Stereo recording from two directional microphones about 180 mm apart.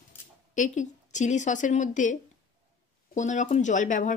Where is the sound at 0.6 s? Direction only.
40° left (ahead or behind).